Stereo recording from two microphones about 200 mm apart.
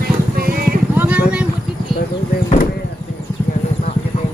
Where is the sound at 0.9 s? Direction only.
5° right (ahead or behind).